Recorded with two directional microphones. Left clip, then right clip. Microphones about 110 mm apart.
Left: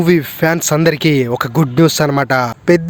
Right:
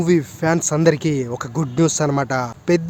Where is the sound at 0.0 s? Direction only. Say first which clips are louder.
Left 5 dB; 45° left (ahead or behind).